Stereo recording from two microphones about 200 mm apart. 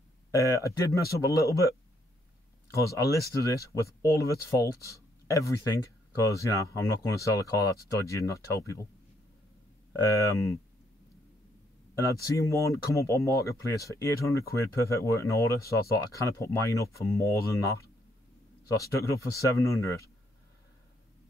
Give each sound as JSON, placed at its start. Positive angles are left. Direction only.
{"t": 0.5, "sound": "speech", "side_deg": 15}
{"t": 2.7, "sound": "speech", "side_deg": 15}
{"t": 6.2, "sound": "speech", "side_deg": 15}
{"t": 10.1, "sound": "speech", "side_deg": 15}
{"t": 11.9, "sound": "speech", "side_deg": 15}